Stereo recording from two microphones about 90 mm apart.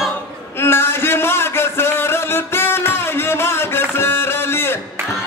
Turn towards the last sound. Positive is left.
turn(degrees=25)  # may be behind; listen again after turning